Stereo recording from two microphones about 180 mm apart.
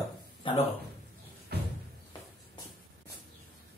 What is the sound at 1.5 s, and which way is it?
Music, 60° right (ahead or behind).